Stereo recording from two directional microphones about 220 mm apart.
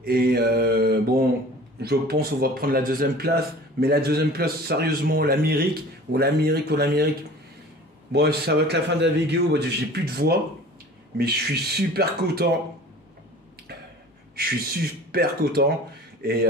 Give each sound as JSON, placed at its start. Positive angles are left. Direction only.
{"t": 0.0, "sound": "mantra", "side_deg": -45}
{"t": 1.8, "sound": "a man's voice", "side_deg": -45}
{"t": 8.1, "sound": "a man's voice", "side_deg": -45}
{"t": 14.3, "sound": "a man's voice", "side_deg": -45}